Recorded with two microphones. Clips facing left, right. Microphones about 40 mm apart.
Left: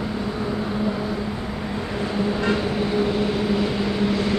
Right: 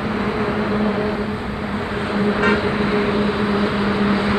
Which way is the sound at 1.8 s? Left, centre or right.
Right.